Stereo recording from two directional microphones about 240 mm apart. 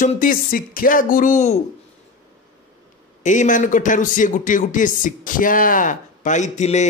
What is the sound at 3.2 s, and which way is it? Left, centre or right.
Speech, left.